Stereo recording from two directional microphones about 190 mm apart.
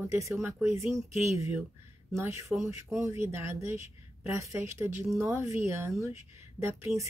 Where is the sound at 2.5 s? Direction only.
Centre (ahead or behind).